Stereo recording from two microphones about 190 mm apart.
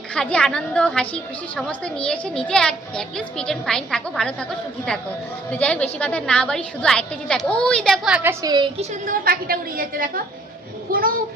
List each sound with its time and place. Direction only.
0.1 s a woman's voice: 5° left (ahead or behind); by 8.9 s 25° right (ahead or behind)
8.9 s a woman's voice: 45° right (ahead or behind)
10.9 s a sound: 50° right (ahead or behind)